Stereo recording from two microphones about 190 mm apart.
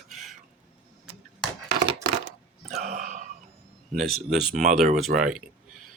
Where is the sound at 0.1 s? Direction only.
Centre (ahead or behind).